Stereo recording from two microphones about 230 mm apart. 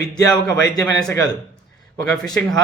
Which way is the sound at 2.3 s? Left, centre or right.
Centre.